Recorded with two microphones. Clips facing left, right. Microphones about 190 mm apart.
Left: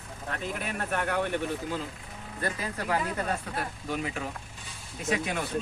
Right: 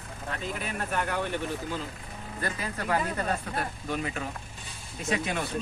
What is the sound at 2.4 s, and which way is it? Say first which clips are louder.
Speech: left 1 dB; 10° left (ahead or behind).